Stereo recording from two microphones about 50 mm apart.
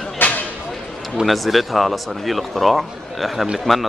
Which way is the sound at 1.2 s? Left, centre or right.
Centre.